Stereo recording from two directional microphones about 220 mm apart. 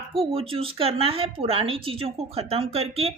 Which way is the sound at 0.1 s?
25° right (ahead or behind).